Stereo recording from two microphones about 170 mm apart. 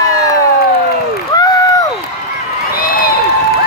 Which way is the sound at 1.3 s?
20° left (ahead or behind).